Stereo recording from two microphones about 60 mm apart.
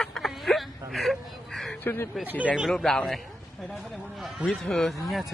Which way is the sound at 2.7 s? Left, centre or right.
Centre.